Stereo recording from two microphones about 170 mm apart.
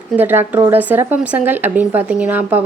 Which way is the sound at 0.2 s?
10° right (ahead or behind).